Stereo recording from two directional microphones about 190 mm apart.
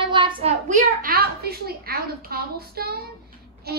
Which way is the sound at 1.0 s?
55° right (ahead or behind).